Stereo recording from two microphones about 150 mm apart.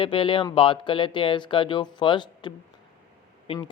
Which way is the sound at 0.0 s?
35° left (ahead or behind).